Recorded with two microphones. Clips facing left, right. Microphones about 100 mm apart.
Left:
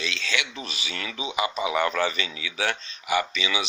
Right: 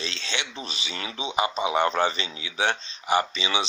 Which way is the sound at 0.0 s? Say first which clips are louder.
Left 3 dB; 30° right (ahead or behind).